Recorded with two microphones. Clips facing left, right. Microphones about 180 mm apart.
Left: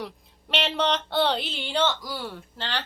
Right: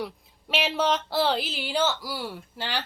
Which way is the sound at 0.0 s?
Centre (ahead or behind).